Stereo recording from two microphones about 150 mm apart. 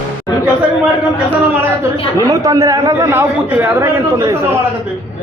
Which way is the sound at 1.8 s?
20° right (ahead or behind).